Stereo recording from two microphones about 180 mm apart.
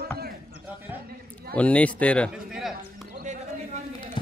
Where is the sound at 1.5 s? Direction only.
5° left (ahead or behind).